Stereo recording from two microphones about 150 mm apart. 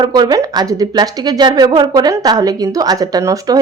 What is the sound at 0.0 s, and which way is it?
Speech, 30° right (ahead or behind).